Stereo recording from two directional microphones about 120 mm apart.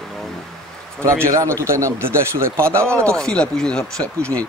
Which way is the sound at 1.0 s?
25° right (ahead or behind).